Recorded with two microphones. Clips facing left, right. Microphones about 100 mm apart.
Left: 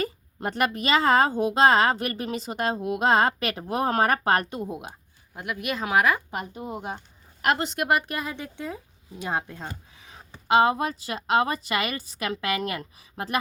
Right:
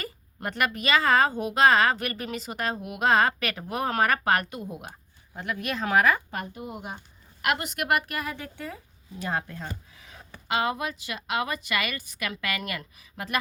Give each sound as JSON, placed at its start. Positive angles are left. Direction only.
{"t": 0.0, "sound": "a woman's voice", "side_deg": 25}
{"t": 5.3, "sound": "speech", "side_deg": 10}
{"t": 7.4, "sound": "a woman's voice", "side_deg": 30}